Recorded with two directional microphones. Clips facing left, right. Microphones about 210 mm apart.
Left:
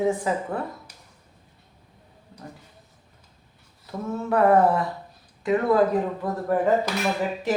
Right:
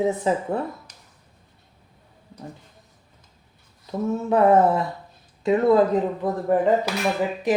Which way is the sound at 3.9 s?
20° right (ahead or behind).